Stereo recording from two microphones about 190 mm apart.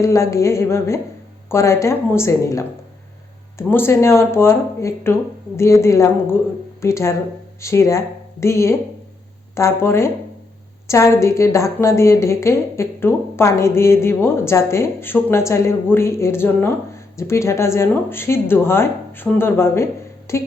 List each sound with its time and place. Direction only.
0.0 s a woman's voice: 15° left (ahead or behind)
3.7 s a woman's voice: 10° left (ahead or behind)